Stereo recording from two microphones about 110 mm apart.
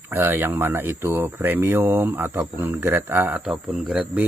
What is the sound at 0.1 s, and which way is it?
Speech, 20° right (ahead or behind).